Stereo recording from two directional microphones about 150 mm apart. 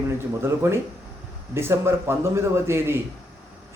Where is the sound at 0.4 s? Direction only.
15° right (ahead or behind).